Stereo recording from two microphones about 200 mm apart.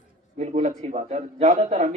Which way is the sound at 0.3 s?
35° right (ahead or behind).